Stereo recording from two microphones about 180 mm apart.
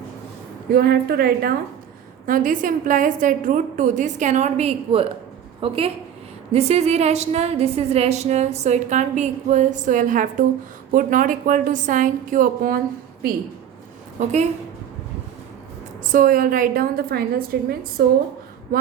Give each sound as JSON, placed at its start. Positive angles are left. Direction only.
{"t": 0.7, "sound": "a woman's voice", "side_deg": -60}
{"t": 16.0, "sound": "a woman's voice", "side_deg": -50}